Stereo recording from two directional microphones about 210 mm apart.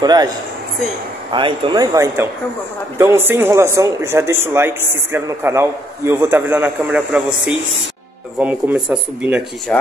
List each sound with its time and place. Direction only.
0.0 s speech: 20° right (ahead or behind)
1.3 s speech: 20° right (ahead or behind); by 7.2 s 5° right (ahead or behind)
8.4 s speech: 5° right (ahead or behind)